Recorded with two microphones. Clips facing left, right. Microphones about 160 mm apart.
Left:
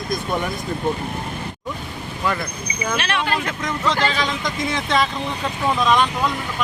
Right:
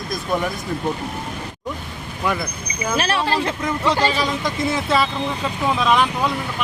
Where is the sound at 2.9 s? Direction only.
35° right (ahead or behind).